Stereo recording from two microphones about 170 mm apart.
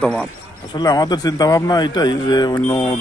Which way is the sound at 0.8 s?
25° left (ahead or behind).